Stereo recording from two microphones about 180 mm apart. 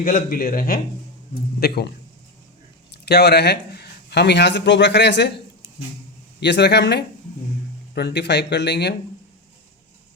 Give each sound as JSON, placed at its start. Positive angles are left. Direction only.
{"t": 0.0, "sound": "a man's voice", "side_deg": 50}
{"t": 2.9, "sound": "a man's voice", "side_deg": 65}
{"t": 6.4, "sound": "speech", "side_deg": 70}